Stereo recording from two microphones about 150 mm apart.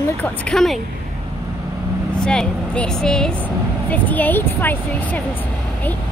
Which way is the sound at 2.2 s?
5° left (ahead or behind).